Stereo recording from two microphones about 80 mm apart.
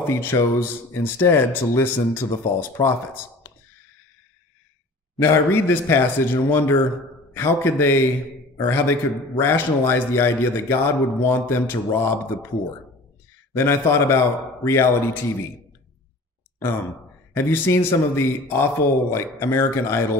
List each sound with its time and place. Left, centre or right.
0.2 s speech: left
5.2 s a man's voice: left
13.6 s speech: left
17.4 s speech: left